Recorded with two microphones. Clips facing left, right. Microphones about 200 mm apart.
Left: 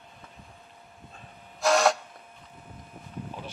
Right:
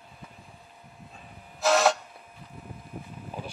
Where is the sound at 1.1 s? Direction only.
Centre (ahead or behind).